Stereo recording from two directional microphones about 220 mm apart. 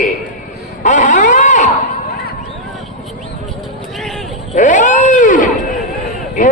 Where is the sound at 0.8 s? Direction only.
35° left (ahead or behind).